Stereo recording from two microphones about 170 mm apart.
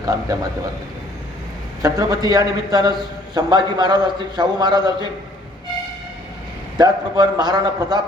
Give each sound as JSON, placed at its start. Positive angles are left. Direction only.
{"t": 0.0, "sound": "a man's voice", "side_deg": -20}
{"t": 1.8, "sound": "a man's voice", "side_deg": -20}
{"t": 6.7, "sound": "a man's voice", "side_deg": -25}